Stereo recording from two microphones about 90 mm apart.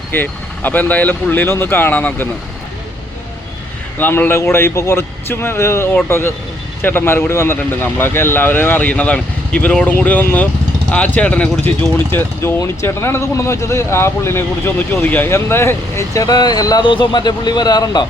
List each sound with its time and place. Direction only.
0.1 s speech: 20° left (ahead or behind)
3.9 s speech: 20° left (ahead or behind); by 16.8 s 45° left (ahead or behind)
16.8 s speech: 60° left (ahead or behind)